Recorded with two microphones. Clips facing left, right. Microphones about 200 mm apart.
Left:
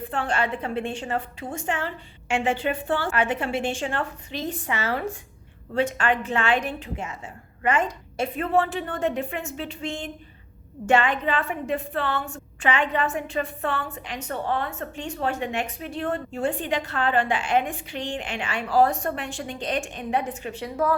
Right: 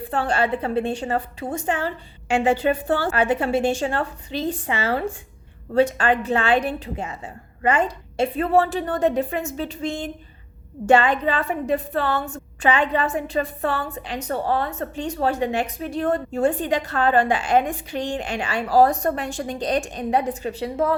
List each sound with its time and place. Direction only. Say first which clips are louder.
0.1 s a woman's voice: right 5 dB; 35° right (ahead or behind)